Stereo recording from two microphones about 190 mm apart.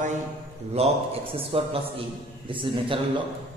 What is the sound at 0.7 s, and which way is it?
A man's voice, 30° right (ahead or behind).